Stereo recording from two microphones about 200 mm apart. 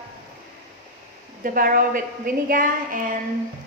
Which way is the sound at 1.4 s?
45° right (ahead or behind).